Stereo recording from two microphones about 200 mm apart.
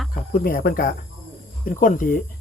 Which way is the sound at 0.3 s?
45° left (ahead or behind).